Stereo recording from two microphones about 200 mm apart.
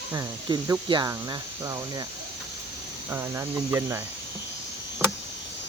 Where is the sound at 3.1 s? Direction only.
10° right (ahead or behind).